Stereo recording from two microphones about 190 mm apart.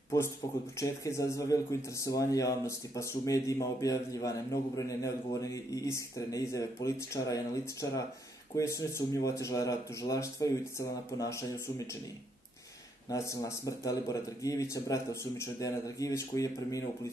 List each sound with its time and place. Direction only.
0.1 s speech: 15° left (ahead or behind)
13.1 s speech: 15° left (ahead or behind)